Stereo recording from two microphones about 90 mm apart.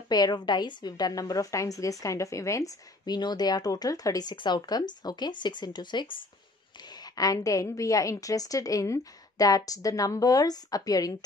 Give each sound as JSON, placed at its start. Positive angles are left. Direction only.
{"t": 0.1, "sound": "a woman's voice", "side_deg": 50}
{"t": 3.2, "sound": "a woman's voice", "side_deg": 50}